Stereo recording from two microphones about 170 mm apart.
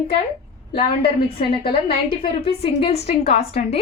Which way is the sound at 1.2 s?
30° left (ahead or behind).